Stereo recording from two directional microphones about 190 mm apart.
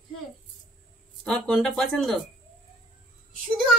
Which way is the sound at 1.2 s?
5° left (ahead or behind).